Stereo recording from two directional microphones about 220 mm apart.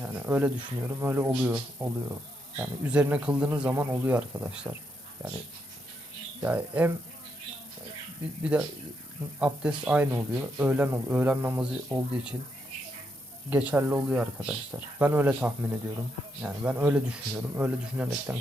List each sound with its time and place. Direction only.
0.0 s speech: 10° right (ahead or behind)
6.4 s speech: 5° right (ahead or behind)
8.5 s speech: 5° right (ahead or behind)
13.5 s speech: 10° right (ahead or behind)